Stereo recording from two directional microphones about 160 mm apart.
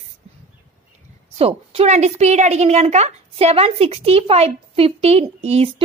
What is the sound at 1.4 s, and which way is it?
A woman's voice, 40° right (ahead or behind).